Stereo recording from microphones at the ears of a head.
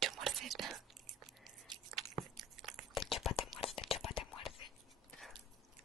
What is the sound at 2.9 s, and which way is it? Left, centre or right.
Whispering, left.